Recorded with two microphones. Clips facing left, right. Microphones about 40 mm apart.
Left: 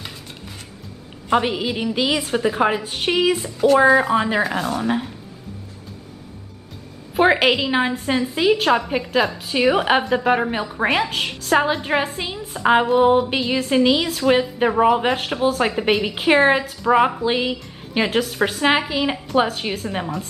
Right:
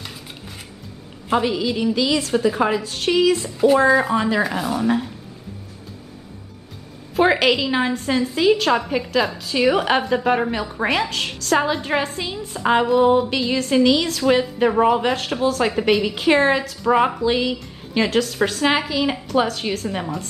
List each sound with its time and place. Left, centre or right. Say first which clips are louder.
1.4 s a woman's voice: right 2 dB; left
7.2 s a woman's voice: left 1 dB; centre
17.2 s a woman's voice: right 1 dB; centre